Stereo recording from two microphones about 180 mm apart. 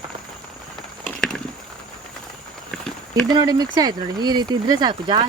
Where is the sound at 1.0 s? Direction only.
5° left (ahead or behind).